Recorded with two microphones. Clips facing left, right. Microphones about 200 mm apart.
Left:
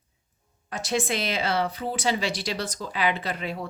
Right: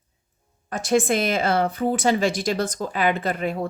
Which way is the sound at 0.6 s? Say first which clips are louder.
Right 7 dB; 50° right (ahead or behind).